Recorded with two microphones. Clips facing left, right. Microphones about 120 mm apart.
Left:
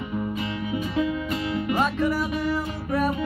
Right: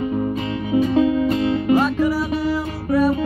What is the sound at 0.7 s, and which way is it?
Music, 35° right (ahead or behind).